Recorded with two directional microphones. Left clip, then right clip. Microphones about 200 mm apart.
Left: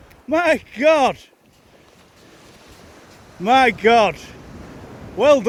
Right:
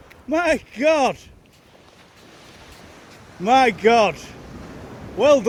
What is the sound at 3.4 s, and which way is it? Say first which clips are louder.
Speech: left 1 dB; 15° left (ahead or behind).